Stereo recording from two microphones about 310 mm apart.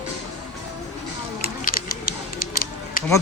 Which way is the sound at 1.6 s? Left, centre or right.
Left.